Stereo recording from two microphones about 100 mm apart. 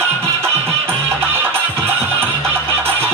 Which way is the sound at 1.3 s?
25° right (ahead or behind).